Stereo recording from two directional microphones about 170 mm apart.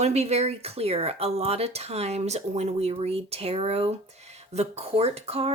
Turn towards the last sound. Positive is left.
turn(degrees=-35)  # may be behind; listen again after turning